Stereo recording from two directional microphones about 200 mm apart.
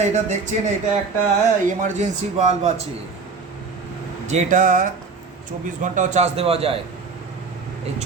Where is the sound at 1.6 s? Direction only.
40° right (ahead or behind).